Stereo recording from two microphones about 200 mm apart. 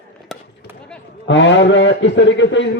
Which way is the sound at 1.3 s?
65° left (ahead or behind).